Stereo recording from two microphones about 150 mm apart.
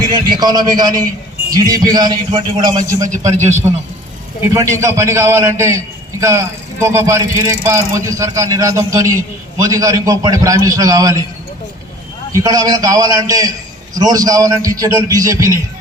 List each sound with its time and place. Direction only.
0.3 s a man's voice: 30° right (ahead or behind)
3.1 s a man's voice: 50° right (ahead or behind)
4.4 s a man's voice: 20° right (ahead or behind)
12.4 s a man's voice: 25° right (ahead or behind)